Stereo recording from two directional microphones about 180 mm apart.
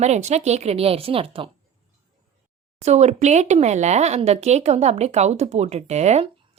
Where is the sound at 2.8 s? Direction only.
40° right (ahead or behind).